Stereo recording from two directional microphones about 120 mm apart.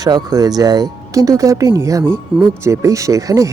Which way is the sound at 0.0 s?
35° right (ahead or behind).